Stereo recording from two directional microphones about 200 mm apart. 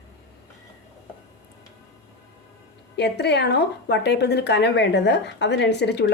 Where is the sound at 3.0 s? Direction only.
55° left (ahead or behind).